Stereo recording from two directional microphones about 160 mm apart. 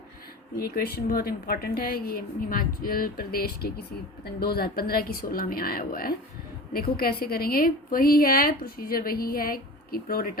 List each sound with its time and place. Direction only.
0.6 s a woman's voice: 70° left (ahead or behind)